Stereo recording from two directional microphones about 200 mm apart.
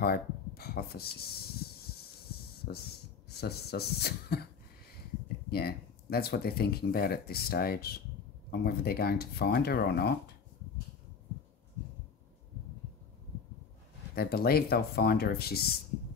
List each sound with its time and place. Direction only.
0.0 s snake: 50° left (ahead or behind)
2.7 s speech: 55° left (ahead or behind)
5.5 s speech: 50° left (ahead or behind)
14.1 s speech: 50° left (ahead or behind)